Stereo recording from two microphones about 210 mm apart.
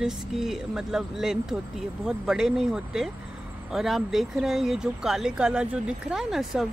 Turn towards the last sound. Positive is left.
turn(degrees=0)  # may be behind; listen again after turning